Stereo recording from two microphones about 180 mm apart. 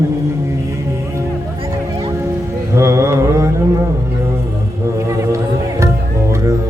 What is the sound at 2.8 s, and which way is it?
Mantra, 15° right (ahead or behind).